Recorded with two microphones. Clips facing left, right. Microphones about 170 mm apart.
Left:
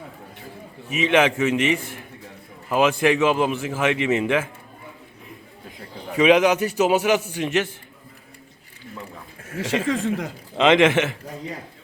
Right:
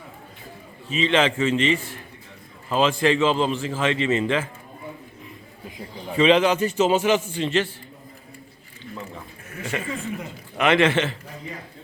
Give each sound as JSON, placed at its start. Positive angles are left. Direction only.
{"t": 0.9, "sound": "a man's voice", "side_deg": 10}
{"t": 6.1, "sound": "a man's voice", "side_deg": 10}
{"t": 9.6, "sound": "speech", "side_deg": 90}
{"t": 10.6, "sound": "a man's voice", "side_deg": 20}